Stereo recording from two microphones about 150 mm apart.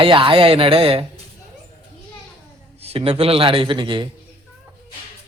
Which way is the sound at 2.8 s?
40° right (ahead or behind).